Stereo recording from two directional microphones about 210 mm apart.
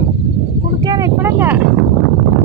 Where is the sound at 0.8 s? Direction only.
15° right (ahead or behind).